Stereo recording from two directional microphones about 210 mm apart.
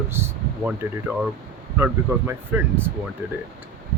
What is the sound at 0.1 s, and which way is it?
Speech, 10° right (ahead or behind).